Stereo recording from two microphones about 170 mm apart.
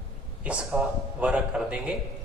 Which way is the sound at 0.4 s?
5° right (ahead or behind).